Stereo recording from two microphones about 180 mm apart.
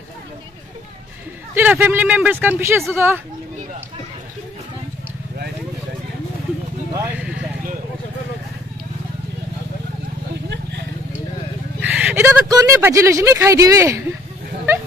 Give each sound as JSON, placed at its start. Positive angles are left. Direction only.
{"t": 1.5, "sound": "speech", "side_deg": -10}
{"t": 6.9, "sound": "a sound", "side_deg": -10}
{"t": 11.8, "sound": "speech", "side_deg": -10}